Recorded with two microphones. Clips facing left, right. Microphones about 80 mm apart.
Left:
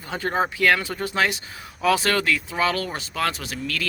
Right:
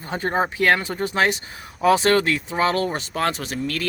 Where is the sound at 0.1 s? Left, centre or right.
Right.